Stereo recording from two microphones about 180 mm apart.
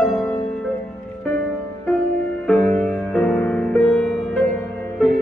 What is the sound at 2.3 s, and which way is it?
Music, 5° left (ahead or behind).